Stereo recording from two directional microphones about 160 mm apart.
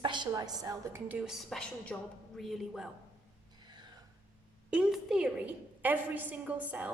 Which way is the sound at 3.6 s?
25° right (ahead or behind).